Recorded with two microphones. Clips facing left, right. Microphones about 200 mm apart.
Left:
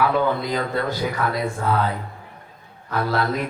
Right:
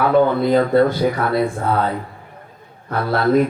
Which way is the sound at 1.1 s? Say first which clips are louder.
Right 4 dB; 30° right (ahead or behind).